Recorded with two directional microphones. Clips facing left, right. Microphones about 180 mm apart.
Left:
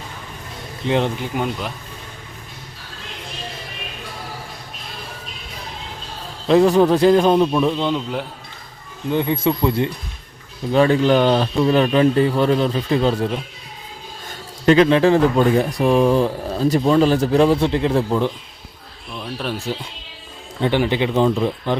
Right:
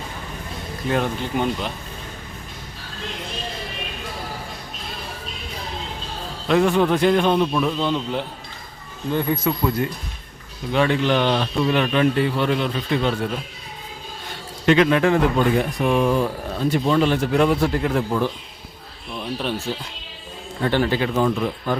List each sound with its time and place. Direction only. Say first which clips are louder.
0.9 s speech: left 3 dB; 20° left (ahead or behind)
1.2 s speech: right 1 dB; 5° left (ahead or behind)
6.5 s a man's voice: left 4 dB; 35° left (ahead or behind)
7.5 s speech: left 3 dB; 25° left (ahead or behind)
7.9 s a man's voice: left 1 dB; 5° left (ahead or behind)
9.1 s speech: left 3 dB; 25° left (ahead or behind)
10.7 s a man's voice: left 5 dB; 40° left (ahead or behind); by 18.3 s 20° left (ahead or behind)
19.1 s speech: right 1 dB; centre (ahead or behind)
20.6 s speech: left 2 dB; 15° left (ahead or behind)